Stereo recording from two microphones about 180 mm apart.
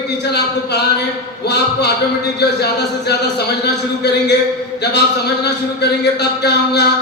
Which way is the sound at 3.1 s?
65° left (ahead or behind).